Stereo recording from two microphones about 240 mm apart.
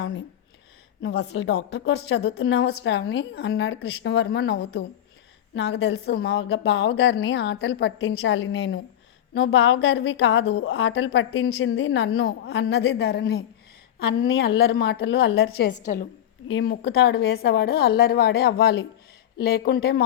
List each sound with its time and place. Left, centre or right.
0.0 s a woman's voice: left
16.5 s a woman's voice: left